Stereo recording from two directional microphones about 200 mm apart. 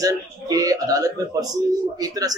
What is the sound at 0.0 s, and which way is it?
Speech, 20° right (ahead or behind).